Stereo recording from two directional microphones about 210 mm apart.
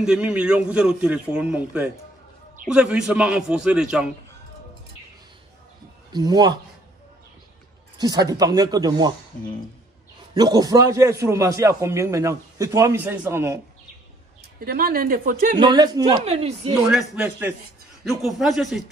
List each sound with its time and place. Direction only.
0.0 s a man's voice: 5° right (ahead or behind)
6.1 s speech: 20° right (ahead or behind)
8.0 s speech: 20° right (ahead or behind)
10.3 s a man's voice: 20° right (ahead or behind)
14.6 s speech: 45° right (ahead or behind)
15.5 s speech: 20° right (ahead or behind)
16.3 s speech: 30° right (ahead or behind)
17.1 s a man's voice: 10° right (ahead or behind)